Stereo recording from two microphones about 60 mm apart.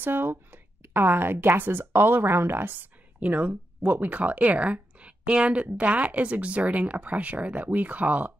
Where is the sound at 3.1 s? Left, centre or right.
Right.